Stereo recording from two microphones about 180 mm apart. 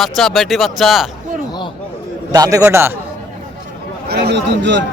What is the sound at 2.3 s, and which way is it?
Speech, 20° right (ahead or behind).